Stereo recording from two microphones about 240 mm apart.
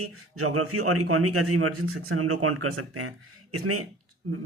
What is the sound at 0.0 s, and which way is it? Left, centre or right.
A man's voice, right.